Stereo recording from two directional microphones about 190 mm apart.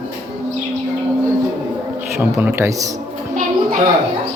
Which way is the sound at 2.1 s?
10° right (ahead or behind).